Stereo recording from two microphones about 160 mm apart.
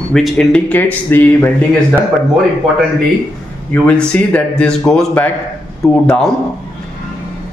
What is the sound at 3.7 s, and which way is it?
Speech, 5° left (ahead or behind).